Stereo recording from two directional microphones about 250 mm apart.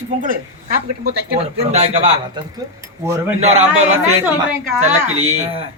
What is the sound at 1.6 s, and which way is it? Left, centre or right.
Speech, right.